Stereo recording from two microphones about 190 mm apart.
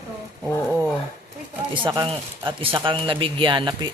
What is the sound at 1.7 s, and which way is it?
Speech, 25° right (ahead or behind).